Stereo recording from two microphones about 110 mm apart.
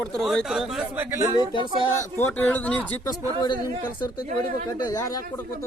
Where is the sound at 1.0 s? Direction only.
20° right (ahead or behind).